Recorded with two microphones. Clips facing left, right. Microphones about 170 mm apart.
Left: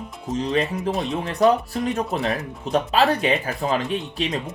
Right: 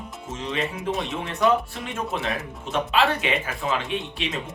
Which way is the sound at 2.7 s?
40° left (ahead or behind).